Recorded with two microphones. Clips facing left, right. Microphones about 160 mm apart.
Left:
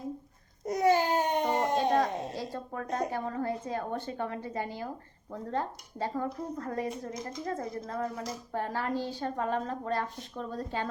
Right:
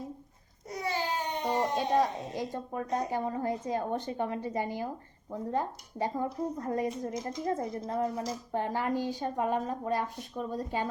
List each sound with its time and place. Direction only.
0.6 s baby cry: 45° left (ahead or behind)
1.7 s a woman's voice: 15° right (ahead or behind)